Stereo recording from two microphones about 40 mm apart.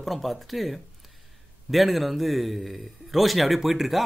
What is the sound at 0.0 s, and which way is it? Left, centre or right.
A man's voice, centre.